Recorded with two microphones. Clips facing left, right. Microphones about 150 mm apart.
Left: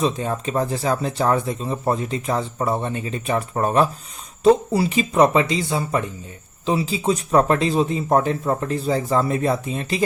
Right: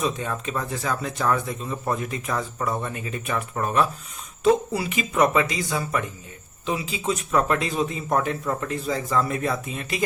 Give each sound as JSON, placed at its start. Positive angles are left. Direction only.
{"t": 0.0, "sound": "speech", "side_deg": 35}